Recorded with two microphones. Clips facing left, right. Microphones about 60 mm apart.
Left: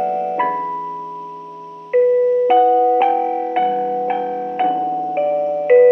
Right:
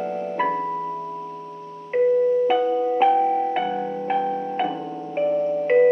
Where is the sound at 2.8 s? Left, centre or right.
Left.